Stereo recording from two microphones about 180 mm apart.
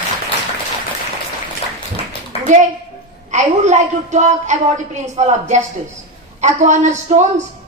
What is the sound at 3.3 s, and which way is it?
A woman's voice, 40° right (ahead or behind).